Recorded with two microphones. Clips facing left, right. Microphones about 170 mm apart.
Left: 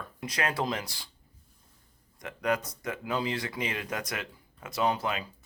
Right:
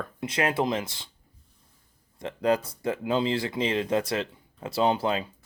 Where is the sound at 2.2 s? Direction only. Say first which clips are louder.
Right 5 dB; 30° right (ahead or behind).